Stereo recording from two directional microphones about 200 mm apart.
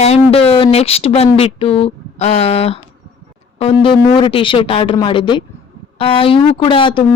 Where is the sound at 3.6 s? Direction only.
30° left (ahead or behind).